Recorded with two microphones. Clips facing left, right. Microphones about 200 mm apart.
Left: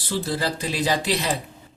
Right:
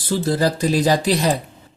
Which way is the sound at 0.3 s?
45° right (ahead or behind).